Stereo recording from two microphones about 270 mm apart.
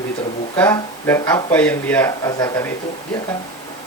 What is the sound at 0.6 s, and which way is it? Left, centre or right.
Speech, centre.